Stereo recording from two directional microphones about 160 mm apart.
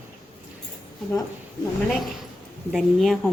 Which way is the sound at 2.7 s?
Centre (ahead or behind).